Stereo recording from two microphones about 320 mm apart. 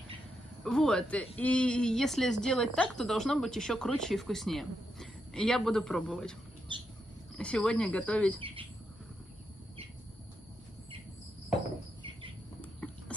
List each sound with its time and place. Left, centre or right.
0.7 s a woman's voice: centre
7.3 s a woman's voice: centre
8.4 s speech: centre